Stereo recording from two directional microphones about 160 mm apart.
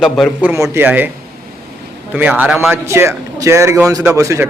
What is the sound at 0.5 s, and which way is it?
A man's voice, 15° right (ahead or behind).